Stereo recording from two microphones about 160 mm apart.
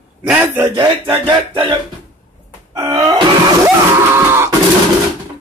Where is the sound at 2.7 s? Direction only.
20° right (ahead or behind).